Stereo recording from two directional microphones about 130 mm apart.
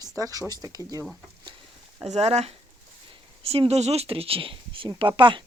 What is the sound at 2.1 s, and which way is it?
Speech, 55° right (ahead or behind).